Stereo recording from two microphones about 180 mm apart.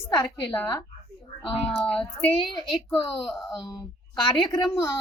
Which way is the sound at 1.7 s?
5° left (ahead or behind).